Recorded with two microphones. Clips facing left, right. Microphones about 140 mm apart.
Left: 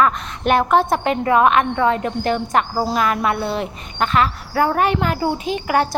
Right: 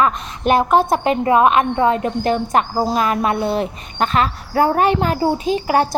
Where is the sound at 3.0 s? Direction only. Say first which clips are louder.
Even; 25° right (ahead or behind).